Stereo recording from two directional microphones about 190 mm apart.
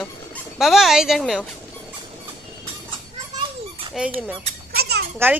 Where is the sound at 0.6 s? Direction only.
Centre (ahead or behind).